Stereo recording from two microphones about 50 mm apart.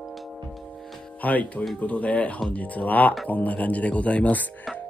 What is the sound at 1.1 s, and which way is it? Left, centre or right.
Speech, left.